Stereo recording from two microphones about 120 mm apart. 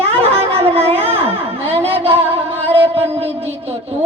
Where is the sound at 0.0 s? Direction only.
55° right (ahead or behind).